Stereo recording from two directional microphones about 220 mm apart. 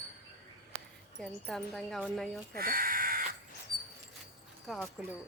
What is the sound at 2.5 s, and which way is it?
Speech, 40° right (ahead or behind).